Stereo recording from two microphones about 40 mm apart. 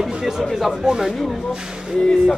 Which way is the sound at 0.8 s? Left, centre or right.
Centre.